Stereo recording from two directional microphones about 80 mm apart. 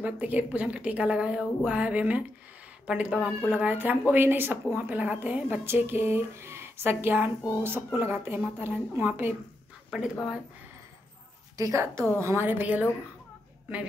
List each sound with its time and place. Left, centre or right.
0.0 s a woman's voice: centre
9.8 s speech: centre
11.5 s a woman's voice: right